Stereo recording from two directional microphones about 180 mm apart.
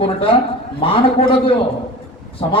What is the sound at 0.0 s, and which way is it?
Speech, 30° left (ahead or behind).